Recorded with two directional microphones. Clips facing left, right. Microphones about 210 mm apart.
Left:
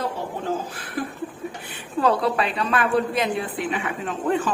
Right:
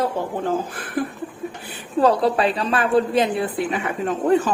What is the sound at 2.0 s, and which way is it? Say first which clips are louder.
A woman's voice: right 4 dB; 35° right (ahead or behind).